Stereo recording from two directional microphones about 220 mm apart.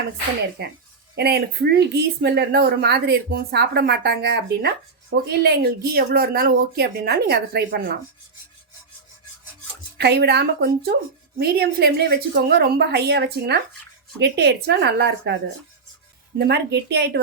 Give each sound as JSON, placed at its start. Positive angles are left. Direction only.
{"t": 0.6, "sound": "speech", "side_deg": -45}
{"t": 10.0, "sound": "speech", "side_deg": -45}
{"t": 16.4, "sound": "speech", "side_deg": -50}